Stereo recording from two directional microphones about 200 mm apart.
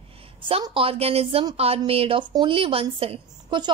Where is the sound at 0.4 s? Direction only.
25° right (ahead or behind).